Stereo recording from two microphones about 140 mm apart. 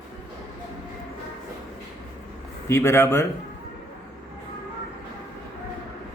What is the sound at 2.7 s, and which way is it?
Speech, 20° left (ahead or behind).